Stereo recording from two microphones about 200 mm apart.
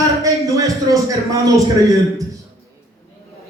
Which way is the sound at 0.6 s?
15° right (ahead or behind).